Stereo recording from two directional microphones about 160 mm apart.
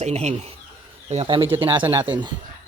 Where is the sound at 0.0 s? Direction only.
45° right (ahead or behind).